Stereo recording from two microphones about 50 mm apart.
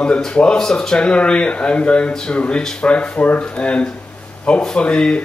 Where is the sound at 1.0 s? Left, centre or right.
Left.